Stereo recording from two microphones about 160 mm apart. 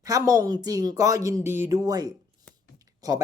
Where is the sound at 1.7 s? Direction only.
20° right (ahead or behind).